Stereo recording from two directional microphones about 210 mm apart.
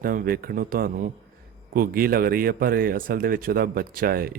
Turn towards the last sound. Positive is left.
turn(degrees=-45)  # may be behind; listen again after turning